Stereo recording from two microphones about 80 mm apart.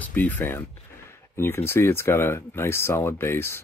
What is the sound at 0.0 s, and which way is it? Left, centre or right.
Speech, left.